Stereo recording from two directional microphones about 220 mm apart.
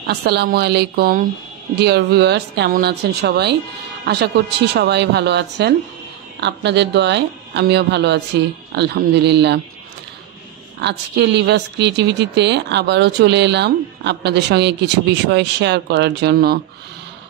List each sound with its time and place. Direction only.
0.0 s speech: 45° right (ahead or behind)
10.8 s speech: 50° right (ahead or behind)